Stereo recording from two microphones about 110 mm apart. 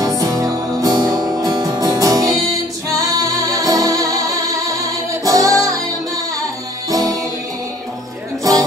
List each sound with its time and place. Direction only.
0.2 s music: 30° right (ahead or behind)
6.9 s music: 35° right (ahead or behind)